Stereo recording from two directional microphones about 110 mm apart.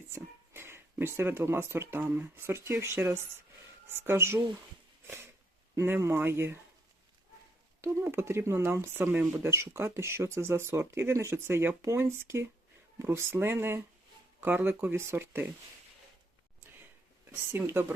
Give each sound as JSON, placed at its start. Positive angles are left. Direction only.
{"t": 0.1, "sound": "a sound", "side_deg": -20}
{"t": 2.0, "sound": "speech", "side_deg": -20}
{"t": 5.0, "sound": "a sound", "side_deg": -20}
{"t": 5.7, "sound": "speech", "side_deg": -25}
{"t": 7.8, "sound": "speech", "side_deg": -20}
{"t": 17.5, "sound": "speech", "side_deg": -20}